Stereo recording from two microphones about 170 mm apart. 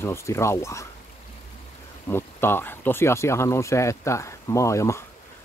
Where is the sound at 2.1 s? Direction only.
15° left (ahead or behind).